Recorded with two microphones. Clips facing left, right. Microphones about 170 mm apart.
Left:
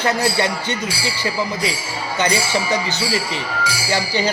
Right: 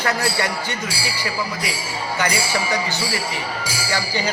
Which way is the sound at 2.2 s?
20° left (ahead or behind).